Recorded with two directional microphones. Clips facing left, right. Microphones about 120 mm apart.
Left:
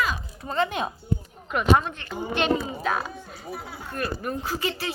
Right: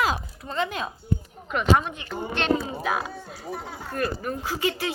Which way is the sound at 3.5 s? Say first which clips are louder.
Right 2 dB; 5° left (ahead or behind).